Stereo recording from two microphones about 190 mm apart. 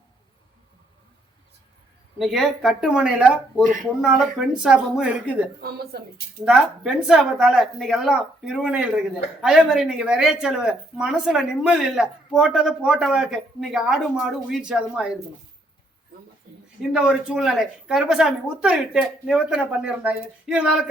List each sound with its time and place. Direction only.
2.1 s a woman's voice: centre (ahead or behind)
5.5 s a woman's voice: 55° right (ahead or behind)
6.4 s a woman's voice: 5° right (ahead or behind)
16.9 s a woman's voice: 5° right (ahead or behind)